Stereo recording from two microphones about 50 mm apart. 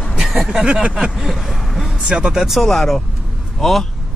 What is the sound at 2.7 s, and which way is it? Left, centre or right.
Speech, centre.